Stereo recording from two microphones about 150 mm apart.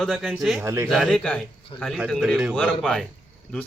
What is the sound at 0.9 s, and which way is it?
Speech, centre (ahead or behind).